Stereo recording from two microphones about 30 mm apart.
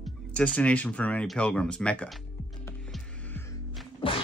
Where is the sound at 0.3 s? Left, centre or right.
Left.